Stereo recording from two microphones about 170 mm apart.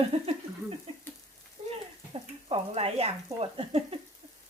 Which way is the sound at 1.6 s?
30° right (ahead or behind).